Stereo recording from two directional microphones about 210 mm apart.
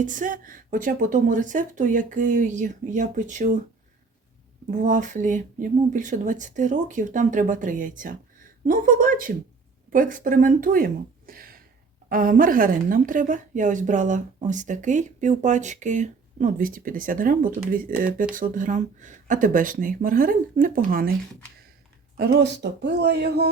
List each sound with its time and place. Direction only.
0.0 s a woman's voice: 40° right (ahead or behind)
4.7 s a woman's voice: 35° right (ahead or behind)
22.2 s speech: 50° right (ahead or behind)